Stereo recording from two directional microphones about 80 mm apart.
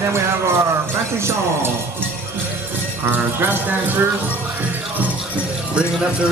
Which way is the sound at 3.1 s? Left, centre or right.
Right.